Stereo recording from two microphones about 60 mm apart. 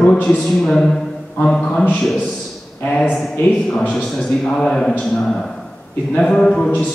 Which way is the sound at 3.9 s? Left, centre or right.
Centre.